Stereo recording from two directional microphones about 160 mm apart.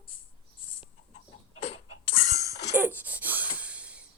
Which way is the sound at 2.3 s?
20° right (ahead or behind).